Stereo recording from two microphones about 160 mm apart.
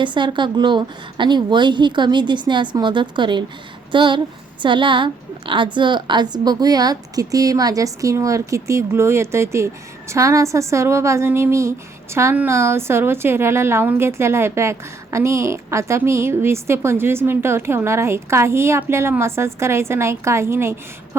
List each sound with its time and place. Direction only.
0.0 s a woman's voice: 30° right (ahead or behind)